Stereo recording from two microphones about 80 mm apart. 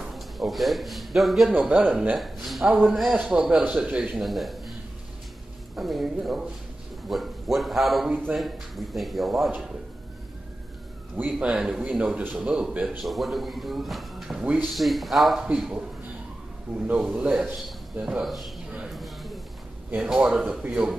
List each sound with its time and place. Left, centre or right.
0.0 s a man's voice: centre
1.5 s a man's voice: centre
2.1 s speech: centre
3.3 s speech: centre
4.2 s a man's voice: centre
5.8 s speech: centre
11.3 s speech: centre
13.0 s speech: centre
14.4 s speech: centre
14.7 s speech: centre
15.4 s a man's voice: centre
18.0 s speech: centre
18.9 s a sound: centre
20.0 s speech: centre